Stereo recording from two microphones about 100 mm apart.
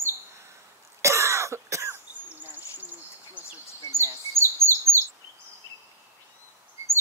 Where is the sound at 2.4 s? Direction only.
20° right (ahead or behind).